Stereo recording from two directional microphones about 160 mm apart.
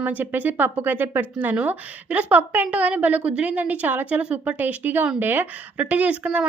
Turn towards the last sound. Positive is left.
turn(degrees=-5)  # may be behind; listen again after turning